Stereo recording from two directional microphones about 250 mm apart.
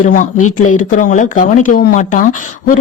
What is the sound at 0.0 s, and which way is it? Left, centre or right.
Speech, left.